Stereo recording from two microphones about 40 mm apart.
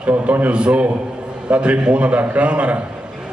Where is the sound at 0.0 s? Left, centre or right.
Right.